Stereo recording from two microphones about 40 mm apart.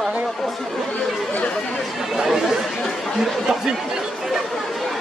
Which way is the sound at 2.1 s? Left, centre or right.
Centre.